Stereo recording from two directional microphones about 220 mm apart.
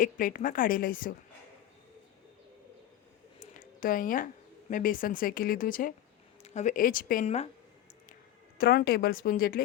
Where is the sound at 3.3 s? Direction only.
40° left (ahead or behind).